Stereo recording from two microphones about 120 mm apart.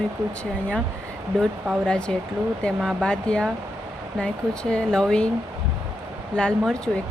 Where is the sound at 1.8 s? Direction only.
5° left (ahead or behind).